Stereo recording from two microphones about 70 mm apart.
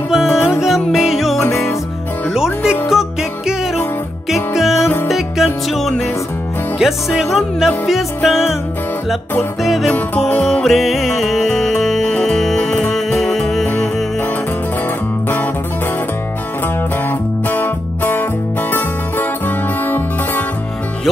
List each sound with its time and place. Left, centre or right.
0.3 s music: left
0.6 s music: centre
1.4 s music: left
2.3 s music: centre
9.6 s music: centre
17.5 s music: left